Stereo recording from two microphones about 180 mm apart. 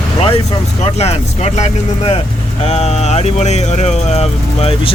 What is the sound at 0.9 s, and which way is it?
Speech, 35° left (ahead or behind).